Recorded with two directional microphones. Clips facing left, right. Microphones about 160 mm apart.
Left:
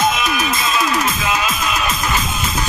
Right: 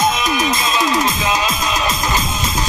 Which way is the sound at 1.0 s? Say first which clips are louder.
Right 1 dB; 35° right (ahead or behind).